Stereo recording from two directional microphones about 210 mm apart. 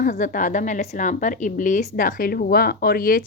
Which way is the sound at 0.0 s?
40° left (ahead or behind).